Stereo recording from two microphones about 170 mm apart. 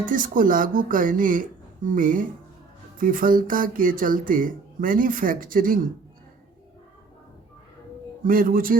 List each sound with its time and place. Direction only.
0.0 s speech: 50° right (ahead or behind)
8.2 s speech: 55° right (ahead or behind)